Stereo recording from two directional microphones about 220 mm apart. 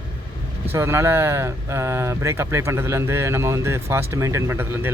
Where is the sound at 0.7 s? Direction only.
10° right (ahead or behind).